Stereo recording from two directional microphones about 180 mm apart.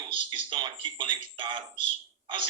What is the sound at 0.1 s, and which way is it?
A man's voice, 30° right (ahead or behind).